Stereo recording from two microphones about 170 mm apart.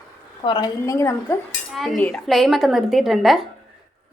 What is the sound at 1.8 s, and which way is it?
Speech, centre (ahead or behind).